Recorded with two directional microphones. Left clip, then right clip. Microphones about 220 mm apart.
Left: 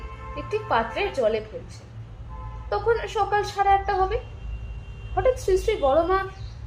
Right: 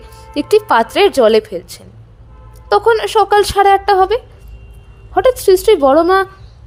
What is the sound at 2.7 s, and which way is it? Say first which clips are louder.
Speech: right 12 dB; 50° right (ahead or behind).